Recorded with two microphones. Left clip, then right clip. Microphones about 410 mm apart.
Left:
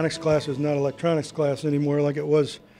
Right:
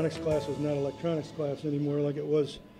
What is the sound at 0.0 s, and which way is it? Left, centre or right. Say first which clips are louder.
Speech: left 6 dB; left.